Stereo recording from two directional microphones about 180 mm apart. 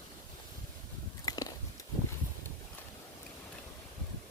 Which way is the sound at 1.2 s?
20° left (ahead or behind).